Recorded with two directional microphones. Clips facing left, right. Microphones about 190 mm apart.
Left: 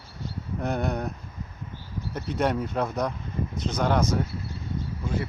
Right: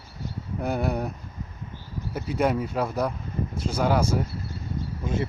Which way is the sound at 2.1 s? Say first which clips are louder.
Right 2 dB; 5° right (ahead or behind).